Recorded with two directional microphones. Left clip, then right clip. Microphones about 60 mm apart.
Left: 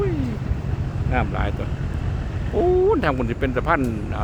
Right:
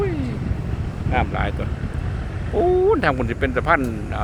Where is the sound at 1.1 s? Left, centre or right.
Centre.